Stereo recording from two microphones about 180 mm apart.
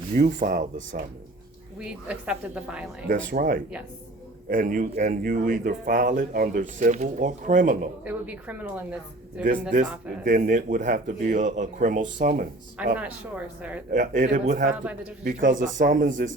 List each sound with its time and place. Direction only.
0.1 s speech: 50° right (ahead or behind)
1.8 s a woman's voice: 5° right (ahead or behind)
3.1 s speech: 50° right (ahead or behind)
8.0 s speech: 10° right (ahead or behind)
10.2 s speech: 45° right (ahead or behind)
12.7 s speech: 5° right (ahead or behind)
13.9 s speech: 45° right (ahead or behind)